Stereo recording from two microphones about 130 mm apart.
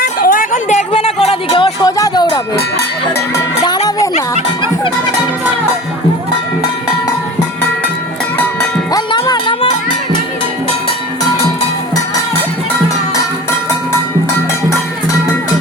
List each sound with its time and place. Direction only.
0.3 s music: 85° left; by 1.9 s 40° left (ahead or behind)
2.0 s music: 30° left (ahead or behind)
8.9 s music: 35° left (ahead or behind)